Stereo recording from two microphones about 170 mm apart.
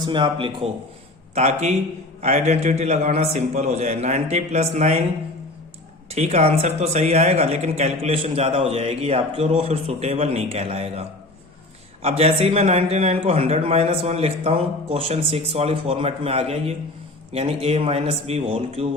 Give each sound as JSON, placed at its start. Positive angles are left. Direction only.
{"t": 0.0, "sound": "speech", "side_deg": -25}
{"t": 1.4, "sound": "speech", "side_deg": -40}
{"t": 6.1, "sound": "speech", "side_deg": -40}
{"t": 12.0, "sound": "speech", "side_deg": -35}